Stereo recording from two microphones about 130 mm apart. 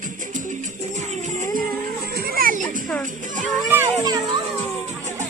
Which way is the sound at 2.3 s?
85° right.